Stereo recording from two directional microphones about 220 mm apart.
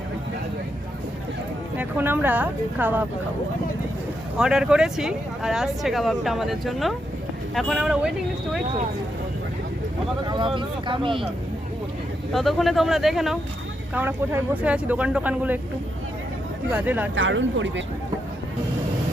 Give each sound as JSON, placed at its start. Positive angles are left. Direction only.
{"t": 1.7, "sound": "speech", "side_deg": -10}
{"t": 4.4, "sound": "speech", "side_deg": -5}
{"t": 10.2, "sound": "speech", "side_deg": -20}
{"t": 12.3, "sound": "speech", "side_deg": 0}
{"t": 16.7, "sound": "speech", "side_deg": -10}
{"t": 17.2, "sound": "speech", "side_deg": -60}